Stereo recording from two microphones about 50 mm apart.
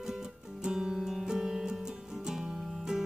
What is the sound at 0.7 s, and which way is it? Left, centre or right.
Music, centre.